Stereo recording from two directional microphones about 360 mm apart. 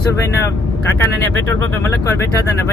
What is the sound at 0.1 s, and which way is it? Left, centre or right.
Speech, centre.